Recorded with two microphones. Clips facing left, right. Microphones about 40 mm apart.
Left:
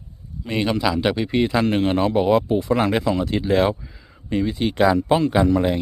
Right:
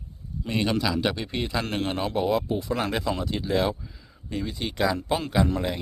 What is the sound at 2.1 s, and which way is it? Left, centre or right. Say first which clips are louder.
A man's voice: left 4 dB; left.